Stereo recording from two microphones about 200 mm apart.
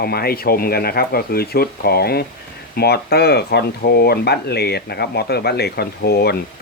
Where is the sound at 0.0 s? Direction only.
50° left (ahead or behind).